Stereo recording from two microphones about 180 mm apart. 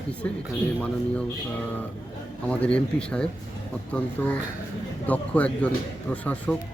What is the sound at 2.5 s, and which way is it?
Speech, 5° left (ahead or behind).